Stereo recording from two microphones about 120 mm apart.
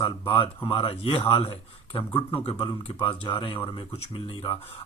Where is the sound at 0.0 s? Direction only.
40° left (ahead or behind).